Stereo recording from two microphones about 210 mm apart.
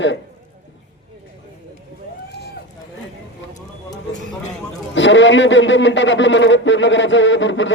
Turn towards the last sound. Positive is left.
turn(degrees=60)  # may be behind; listen again after turning